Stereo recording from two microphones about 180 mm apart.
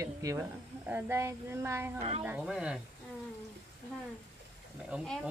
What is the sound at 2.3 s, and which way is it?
Speech, 5° right (ahead or behind).